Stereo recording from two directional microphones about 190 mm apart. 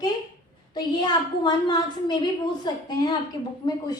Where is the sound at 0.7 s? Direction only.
25° left (ahead or behind).